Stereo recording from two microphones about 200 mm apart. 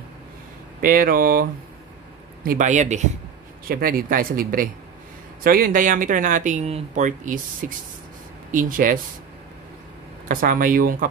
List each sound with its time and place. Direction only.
0.7 s speech: 45° right (ahead or behind)
10.2 s speech: 45° right (ahead or behind)